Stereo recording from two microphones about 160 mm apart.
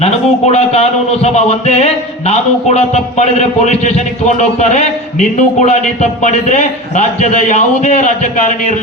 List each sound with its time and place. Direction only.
0.0 s speech: 40° left (ahead or behind)